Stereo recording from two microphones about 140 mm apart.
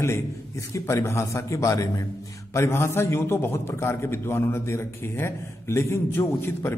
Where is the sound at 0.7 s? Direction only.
20° left (ahead or behind).